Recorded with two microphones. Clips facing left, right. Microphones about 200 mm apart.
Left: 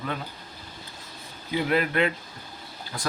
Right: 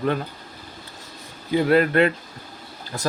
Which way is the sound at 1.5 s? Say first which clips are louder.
Right 7 dB; 45° right (ahead or behind).